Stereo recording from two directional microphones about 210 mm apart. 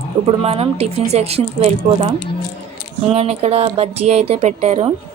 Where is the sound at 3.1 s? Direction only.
30° right (ahead or behind).